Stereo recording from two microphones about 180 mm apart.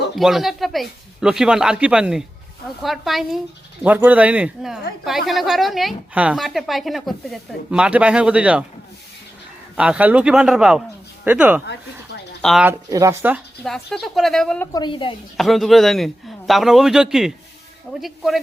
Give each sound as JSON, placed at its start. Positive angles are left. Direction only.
{"t": 0.2, "sound": "a woman's voice", "side_deg": 0}
{"t": 9.7, "sound": "a woman's voice", "side_deg": -5}
{"t": 11.6, "sound": "a sound", "side_deg": 70}
{"t": 12.4, "sound": "speech", "side_deg": 0}
{"t": 12.6, "sound": "speech", "side_deg": -20}
{"t": 13.6, "sound": "a woman's voice", "side_deg": 0}
{"t": 14.7, "sound": "a woman's voice", "side_deg": 25}
{"t": 15.4, "sound": "a woman's voice", "side_deg": 0}